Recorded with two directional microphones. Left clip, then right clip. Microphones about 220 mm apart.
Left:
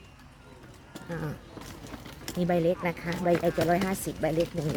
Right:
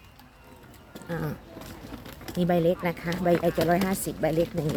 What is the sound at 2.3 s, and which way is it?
Speech, 10° right (ahead or behind).